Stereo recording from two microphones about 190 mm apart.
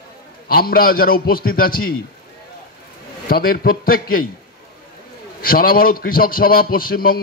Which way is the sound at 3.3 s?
50° left (ahead or behind).